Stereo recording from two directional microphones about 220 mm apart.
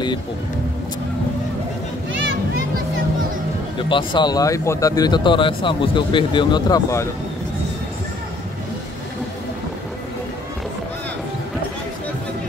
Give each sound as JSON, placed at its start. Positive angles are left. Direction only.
{"t": 3.7, "sound": "speech", "side_deg": 20}